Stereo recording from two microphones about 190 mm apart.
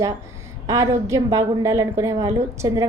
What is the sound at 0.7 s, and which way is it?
A woman's voice, 15° right (ahead or behind).